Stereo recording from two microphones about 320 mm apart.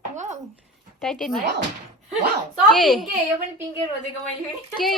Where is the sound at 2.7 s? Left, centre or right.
Centre.